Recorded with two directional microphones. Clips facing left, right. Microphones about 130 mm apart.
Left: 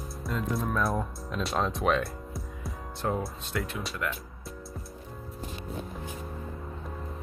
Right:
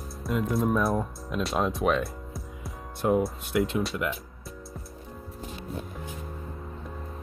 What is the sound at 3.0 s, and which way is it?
Speech, 15° right (ahead or behind).